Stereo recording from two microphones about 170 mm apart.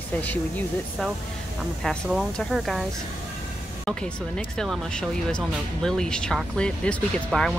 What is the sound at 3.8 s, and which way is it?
Speech, 5° left (ahead or behind).